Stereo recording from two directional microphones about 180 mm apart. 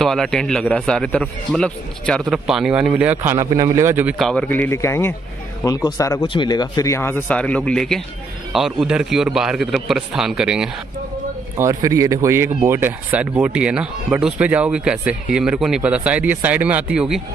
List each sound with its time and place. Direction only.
0.0 s a man's voice: centre (ahead or behind)
11.5 s speech: 20° right (ahead or behind)